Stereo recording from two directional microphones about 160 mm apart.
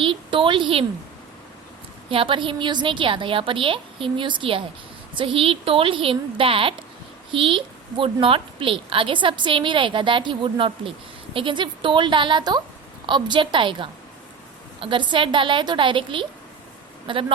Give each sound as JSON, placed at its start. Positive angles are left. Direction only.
{"t": 0.0, "sound": "a woman's voice", "side_deg": -30}
{"t": 2.0, "sound": "a woman's voice", "side_deg": -35}